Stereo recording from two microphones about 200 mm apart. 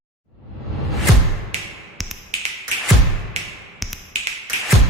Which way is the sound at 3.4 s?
35° right (ahead or behind).